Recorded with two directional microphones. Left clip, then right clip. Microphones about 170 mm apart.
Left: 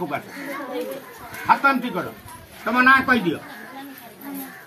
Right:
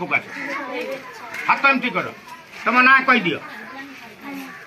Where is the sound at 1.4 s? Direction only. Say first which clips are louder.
Right 1 dB; 20° left (ahead or behind).